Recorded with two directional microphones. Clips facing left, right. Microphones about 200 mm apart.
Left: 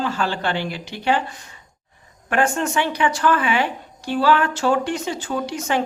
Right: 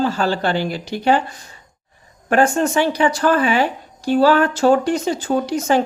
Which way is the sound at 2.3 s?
35° right (ahead or behind).